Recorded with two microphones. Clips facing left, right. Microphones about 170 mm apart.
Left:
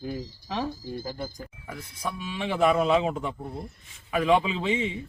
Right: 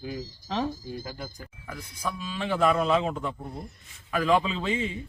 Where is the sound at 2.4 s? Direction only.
5° left (ahead or behind).